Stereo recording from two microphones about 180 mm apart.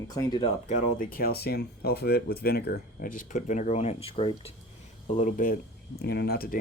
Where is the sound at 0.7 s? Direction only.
50° left (ahead or behind); by 4.5 s 30° left (ahead or behind).